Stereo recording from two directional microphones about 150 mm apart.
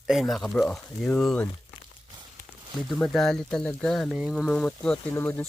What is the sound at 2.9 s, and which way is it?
Speech, centre (ahead or behind).